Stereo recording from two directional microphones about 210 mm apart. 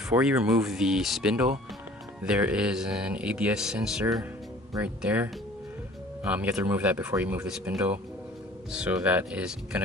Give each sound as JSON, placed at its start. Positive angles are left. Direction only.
{"t": 0.1, "sound": "speech", "side_deg": -5}